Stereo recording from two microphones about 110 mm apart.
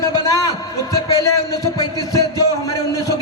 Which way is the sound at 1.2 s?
30° left (ahead or behind).